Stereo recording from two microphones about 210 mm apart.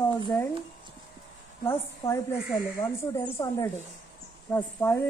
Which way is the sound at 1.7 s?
15° left (ahead or behind).